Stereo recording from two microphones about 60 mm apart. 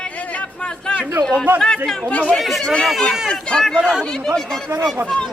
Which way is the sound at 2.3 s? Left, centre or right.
Centre.